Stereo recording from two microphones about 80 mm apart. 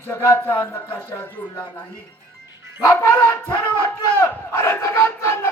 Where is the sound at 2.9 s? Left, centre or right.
Left.